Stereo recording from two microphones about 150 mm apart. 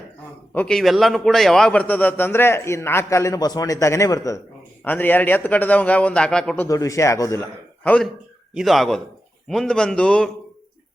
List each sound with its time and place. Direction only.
0.5 s a man's voice: 5° left (ahead or behind)
6.7 s a man's voice: 20° left (ahead or behind)
7.9 s a man's voice: 5° left (ahead or behind)